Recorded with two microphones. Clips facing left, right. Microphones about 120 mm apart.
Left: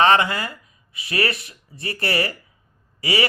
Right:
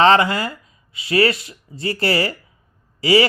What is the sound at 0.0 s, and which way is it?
Speech, 30° right (ahead or behind).